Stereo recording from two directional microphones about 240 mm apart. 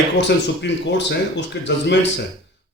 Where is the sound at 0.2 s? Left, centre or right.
Left.